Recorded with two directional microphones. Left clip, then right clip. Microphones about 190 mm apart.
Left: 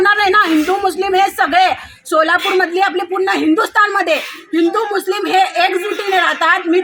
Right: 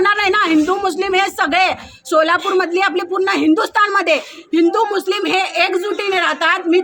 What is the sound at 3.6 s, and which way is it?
Speech, 25° right (ahead or behind).